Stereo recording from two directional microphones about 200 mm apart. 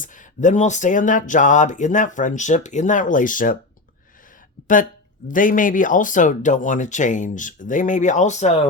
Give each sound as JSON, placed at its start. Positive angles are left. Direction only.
{"t": 0.0, "sound": "speech", "side_deg": 40}
{"t": 5.3, "sound": "speech", "side_deg": 40}